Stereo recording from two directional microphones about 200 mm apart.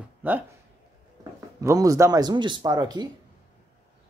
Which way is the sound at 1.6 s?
15° right (ahead or behind).